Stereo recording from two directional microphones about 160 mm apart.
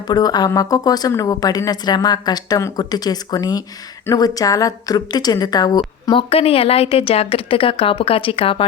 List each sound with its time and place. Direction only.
0.1 s a woman's voice: 25° left (ahead or behind)